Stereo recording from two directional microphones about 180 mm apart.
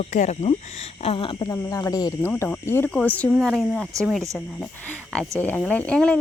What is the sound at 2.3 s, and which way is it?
Cricket, 5° left (ahead or behind).